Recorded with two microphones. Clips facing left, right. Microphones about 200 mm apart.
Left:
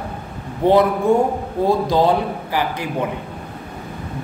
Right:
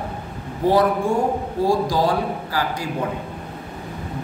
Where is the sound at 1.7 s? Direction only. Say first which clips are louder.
Left 4 dB; 25° left (ahead or behind).